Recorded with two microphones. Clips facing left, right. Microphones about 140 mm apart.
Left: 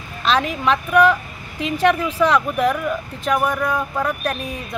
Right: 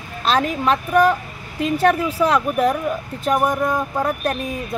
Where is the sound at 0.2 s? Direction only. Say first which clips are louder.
Even; 40° right (ahead or behind).